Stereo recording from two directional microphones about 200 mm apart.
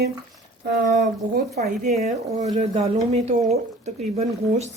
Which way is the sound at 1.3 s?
40° right (ahead or behind).